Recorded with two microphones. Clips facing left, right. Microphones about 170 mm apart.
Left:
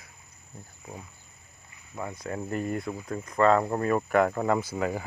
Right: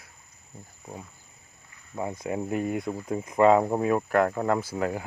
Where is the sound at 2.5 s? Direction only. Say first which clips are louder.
Right 1 dB; 5° right (ahead or behind).